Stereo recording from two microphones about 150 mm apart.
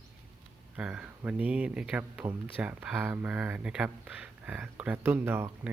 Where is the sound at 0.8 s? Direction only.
5° right (ahead or behind).